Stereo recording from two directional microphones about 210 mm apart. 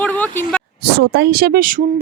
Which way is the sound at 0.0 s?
10° left (ahead or behind).